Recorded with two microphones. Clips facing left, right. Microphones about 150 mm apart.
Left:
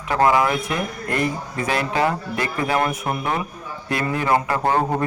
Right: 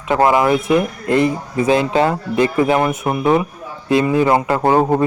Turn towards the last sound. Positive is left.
turn(degrees=-20)  # may be behind; listen again after turning